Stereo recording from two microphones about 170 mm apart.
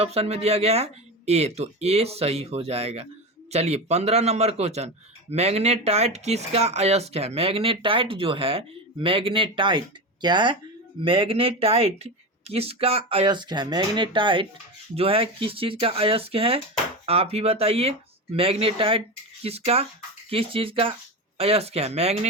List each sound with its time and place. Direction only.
0.0 s speech: 35° right (ahead or behind)